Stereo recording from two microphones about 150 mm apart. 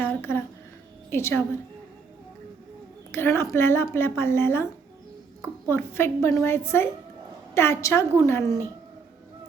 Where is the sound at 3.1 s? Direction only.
15° left (ahead or behind).